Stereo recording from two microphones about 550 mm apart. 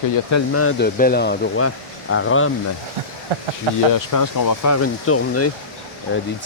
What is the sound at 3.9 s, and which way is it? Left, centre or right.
Speech, left.